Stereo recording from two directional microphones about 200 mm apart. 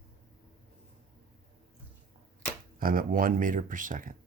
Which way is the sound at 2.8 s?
45° right (ahead or behind).